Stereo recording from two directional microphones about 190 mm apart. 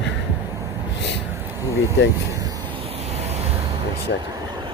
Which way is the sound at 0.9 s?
65° left (ahead or behind).